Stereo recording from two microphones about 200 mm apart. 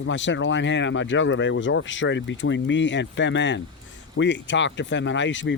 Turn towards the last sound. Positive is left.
turn(degrees=65)  # may be behind; listen again after turning